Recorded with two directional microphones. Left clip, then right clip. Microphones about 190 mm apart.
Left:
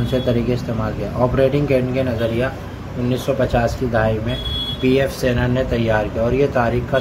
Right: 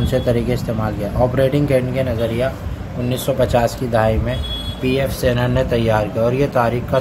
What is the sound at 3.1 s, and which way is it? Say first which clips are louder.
Speech: right 1 dB; 15° right (ahead or behind).